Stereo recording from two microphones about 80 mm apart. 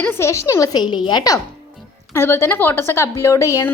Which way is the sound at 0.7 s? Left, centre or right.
Left.